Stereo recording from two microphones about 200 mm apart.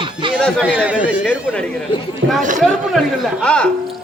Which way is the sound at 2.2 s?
65° right (ahead or behind).